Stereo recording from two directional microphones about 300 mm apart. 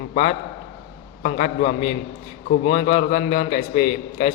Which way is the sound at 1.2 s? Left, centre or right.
Left.